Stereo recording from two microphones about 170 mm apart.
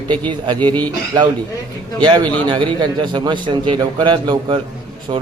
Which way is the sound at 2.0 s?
30° right (ahead or behind).